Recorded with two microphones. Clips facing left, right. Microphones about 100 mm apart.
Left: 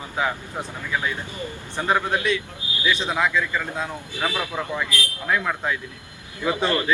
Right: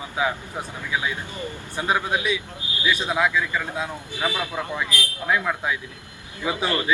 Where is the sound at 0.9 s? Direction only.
10° right (ahead or behind).